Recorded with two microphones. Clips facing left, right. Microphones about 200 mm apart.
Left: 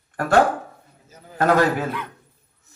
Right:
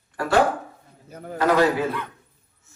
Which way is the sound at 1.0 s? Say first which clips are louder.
Right 10 dB; 60° right (ahead or behind).